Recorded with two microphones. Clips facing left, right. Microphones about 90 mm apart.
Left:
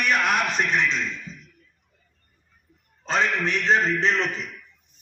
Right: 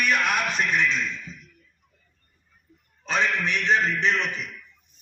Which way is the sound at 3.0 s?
35° left (ahead or behind).